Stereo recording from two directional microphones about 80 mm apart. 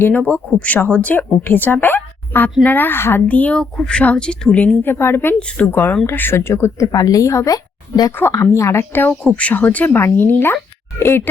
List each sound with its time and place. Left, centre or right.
0.0 s speech: left
5.4 s speech: centre
5.7 s a woman's voice: left
9.2 s speech: centre